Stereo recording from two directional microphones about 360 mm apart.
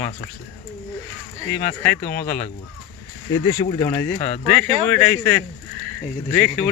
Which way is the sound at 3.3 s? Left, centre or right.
Centre.